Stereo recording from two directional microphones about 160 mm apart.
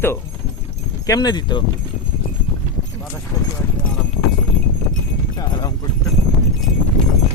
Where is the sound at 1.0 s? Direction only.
25° left (ahead or behind).